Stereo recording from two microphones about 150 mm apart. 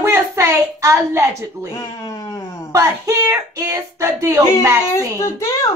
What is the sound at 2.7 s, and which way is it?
Speech, 20° right (ahead or behind).